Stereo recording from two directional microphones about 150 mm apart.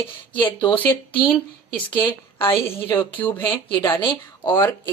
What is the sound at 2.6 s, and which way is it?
Speech, 15° left (ahead or behind).